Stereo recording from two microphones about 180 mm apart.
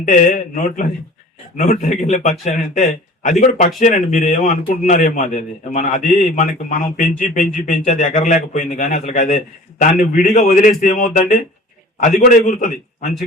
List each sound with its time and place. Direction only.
0.0 s a man's voice: 45° left (ahead or behind)